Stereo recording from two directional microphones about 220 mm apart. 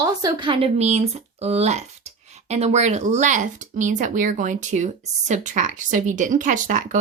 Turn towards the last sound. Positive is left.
turn(degrees=-35)  # may be behind; listen again after turning